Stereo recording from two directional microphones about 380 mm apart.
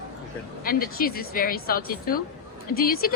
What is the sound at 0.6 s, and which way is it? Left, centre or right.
A woman's voice, left.